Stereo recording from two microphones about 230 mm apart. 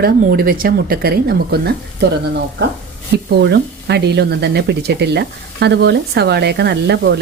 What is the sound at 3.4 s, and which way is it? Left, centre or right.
Speech, right.